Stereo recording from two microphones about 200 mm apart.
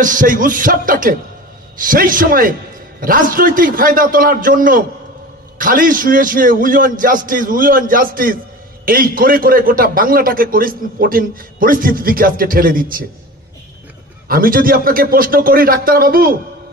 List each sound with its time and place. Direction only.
0.0 s a man's voice: 40° right (ahead or behind)
14.2 s a man's voice: 45° right (ahead or behind)